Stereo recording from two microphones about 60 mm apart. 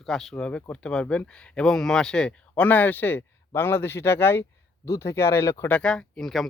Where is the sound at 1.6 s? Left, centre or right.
Centre; by 4.4 s left.